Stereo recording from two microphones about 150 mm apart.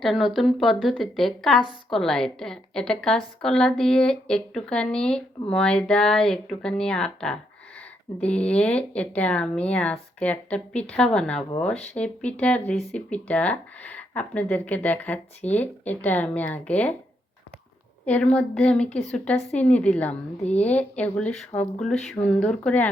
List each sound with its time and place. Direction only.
0.0 s a woman's voice: centre (ahead or behind)
18.0 s speech: 10° left (ahead or behind)